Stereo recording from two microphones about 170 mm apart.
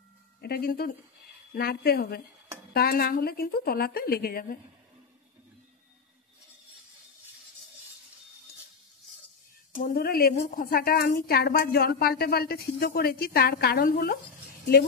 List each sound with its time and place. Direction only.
0.4 s speech: 65° left (ahead or behind)
9.8 s speech: 60° left (ahead or behind)